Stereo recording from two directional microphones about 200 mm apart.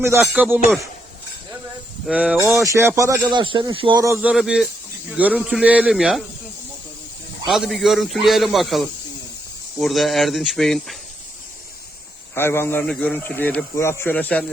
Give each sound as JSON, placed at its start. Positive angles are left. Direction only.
{"t": 0.0, "sound": "speech", "side_deg": -15}
{"t": 2.0, "sound": "a man's voice", "side_deg": -5}
{"t": 7.4, "sound": "a man's voice", "side_deg": 0}
{"t": 12.3, "sound": "speech", "side_deg": 10}